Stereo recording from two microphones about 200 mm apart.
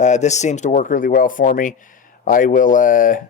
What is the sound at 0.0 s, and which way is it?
A man's voice, 35° left (ahead or behind).